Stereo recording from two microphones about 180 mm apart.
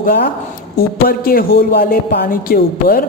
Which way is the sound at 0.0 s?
55° left (ahead or behind).